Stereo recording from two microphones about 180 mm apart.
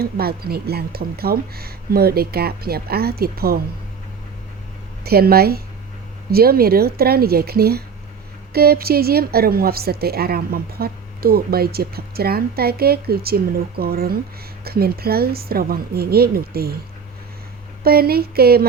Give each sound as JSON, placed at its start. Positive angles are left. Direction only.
{"t": 0.0, "sound": "a woman's voice", "side_deg": -60}
{"t": 5.0, "sound": "a woman's voice", "side_deg": -60}
{"t": 17.8, "sound": "a woman's voice", "side_deg": -60}